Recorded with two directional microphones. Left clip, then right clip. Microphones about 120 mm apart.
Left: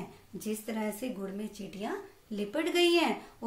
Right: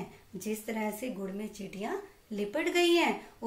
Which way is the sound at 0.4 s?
25° left (ahead or behind).